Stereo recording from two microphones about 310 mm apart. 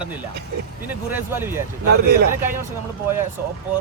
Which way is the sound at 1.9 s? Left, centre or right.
Right.